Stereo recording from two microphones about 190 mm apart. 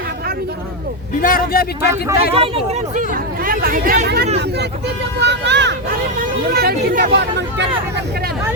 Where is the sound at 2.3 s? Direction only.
35° right (ahead or behind); by 6.0 s 65° right (ahead or behind).